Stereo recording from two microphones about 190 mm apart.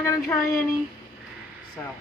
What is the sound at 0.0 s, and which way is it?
Speech, 15° left (ahead or behind).